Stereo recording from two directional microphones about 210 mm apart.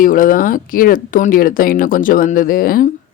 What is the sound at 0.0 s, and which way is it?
Speech, 40° left (ahead or behind).